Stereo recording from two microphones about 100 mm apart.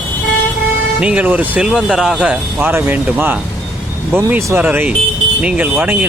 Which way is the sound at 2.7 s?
20° right (ahead or behind).